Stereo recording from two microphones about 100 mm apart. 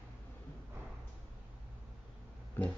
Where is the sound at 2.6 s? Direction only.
20° left (ahead or behind).